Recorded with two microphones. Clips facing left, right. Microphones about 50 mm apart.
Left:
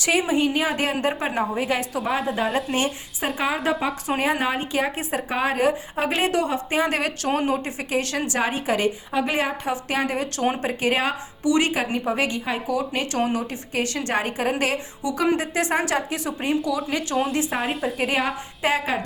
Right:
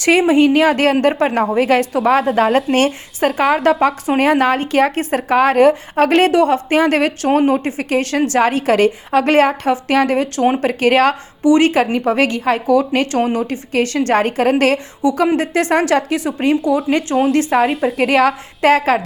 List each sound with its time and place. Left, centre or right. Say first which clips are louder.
0.0 s a woman's voice: right 9 dB; right
2.0 s a woman's voice: right 10 dB; right
2.7 s a woman's voice: right 9 dB; right
9.7 s a woman's voice: right 10 dB; right
11.4 s speech: right 9 dB; right
11.7 s a woman's voice: right 9 dB; right
17.9 s speech: right 10 dB; right